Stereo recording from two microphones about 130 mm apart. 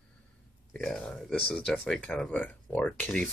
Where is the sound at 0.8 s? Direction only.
5° left (ahead or behind).